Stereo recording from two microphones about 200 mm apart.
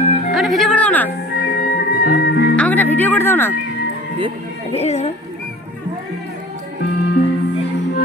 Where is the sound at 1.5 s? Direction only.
50° left (ahead or behind).